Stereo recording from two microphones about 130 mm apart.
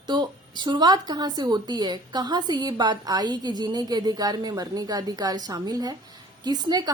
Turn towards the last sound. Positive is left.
turn(degrees=-30)  # may be behind; listen again after turning